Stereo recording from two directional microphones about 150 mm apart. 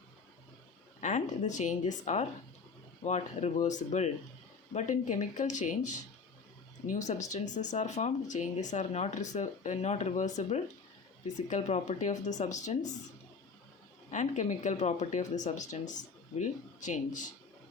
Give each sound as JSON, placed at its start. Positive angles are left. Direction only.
{"t": 1.0, "sound": "speech", "side_deg": 50}
{"t": 14.1, "sound": "speech", "side_deg": 55}